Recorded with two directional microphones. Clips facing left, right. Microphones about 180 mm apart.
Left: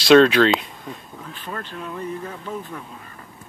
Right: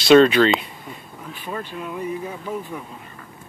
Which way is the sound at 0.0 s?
Centre (ahead or behind).